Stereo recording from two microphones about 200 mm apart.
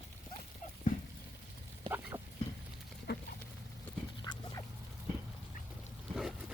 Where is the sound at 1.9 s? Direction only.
10° right (ahead or behind).